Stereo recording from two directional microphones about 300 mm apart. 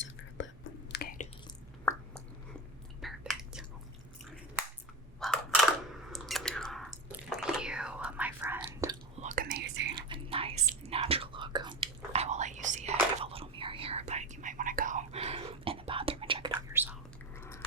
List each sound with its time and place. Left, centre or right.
0.0 s whispering: left
3.0 s chewing: centre
5.2 s a sound: centre
6.1 s chewing: centre
9.2 s whispering: right
9.9 s whispering: centre
16.5 s whispering: centre
17.3 s biting: centre